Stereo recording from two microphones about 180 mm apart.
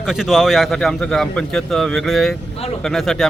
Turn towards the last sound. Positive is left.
turn(degrees=0)  # may be behind; listen again after turning